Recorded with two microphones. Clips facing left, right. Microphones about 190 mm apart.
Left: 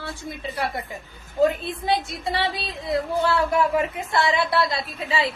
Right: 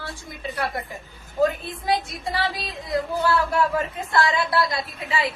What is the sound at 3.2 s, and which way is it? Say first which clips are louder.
A woman's voice: even; 25° left (ahead or behind).